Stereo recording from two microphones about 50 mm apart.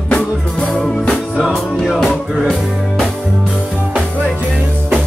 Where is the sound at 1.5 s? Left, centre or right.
Centre.